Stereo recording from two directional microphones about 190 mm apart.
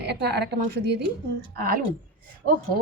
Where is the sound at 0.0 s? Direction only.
60° right (ahead or behind).